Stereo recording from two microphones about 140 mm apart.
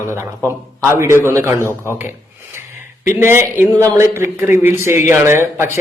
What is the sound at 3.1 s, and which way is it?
A man's voice, 15° right (ahead or behind).